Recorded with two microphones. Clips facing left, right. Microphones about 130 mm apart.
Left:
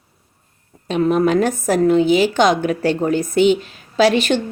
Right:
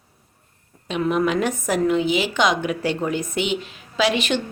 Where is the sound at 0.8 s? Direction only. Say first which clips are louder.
Left 5 dB; 40° left (ahead or behind).